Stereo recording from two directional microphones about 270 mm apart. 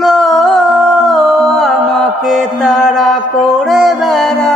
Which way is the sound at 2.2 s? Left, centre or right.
Centre.